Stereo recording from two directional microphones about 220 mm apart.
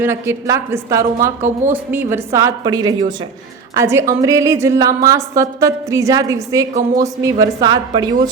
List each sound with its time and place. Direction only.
0.0 s a woman's voice: 10° right (ahead or behind)